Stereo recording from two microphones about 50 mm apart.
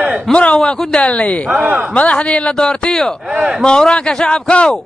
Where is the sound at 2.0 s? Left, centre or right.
Left.